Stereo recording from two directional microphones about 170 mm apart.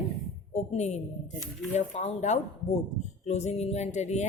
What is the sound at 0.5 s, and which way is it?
A woman's voice, 40° left (ahead or behind).